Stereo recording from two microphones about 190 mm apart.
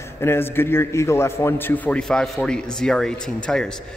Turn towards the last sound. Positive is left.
turn(degrees=5)  # may be behind; listen again after turning